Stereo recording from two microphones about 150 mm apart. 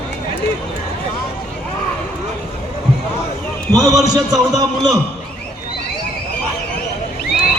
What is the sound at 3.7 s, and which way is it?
A man's voice, 25° right (ahead or behind).